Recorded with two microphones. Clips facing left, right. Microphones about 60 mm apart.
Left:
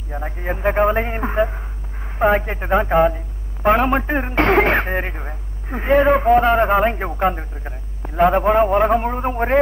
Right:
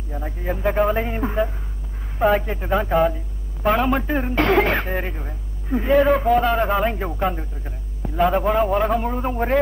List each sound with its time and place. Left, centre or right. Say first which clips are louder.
0.1 s speech: left 2 dB; left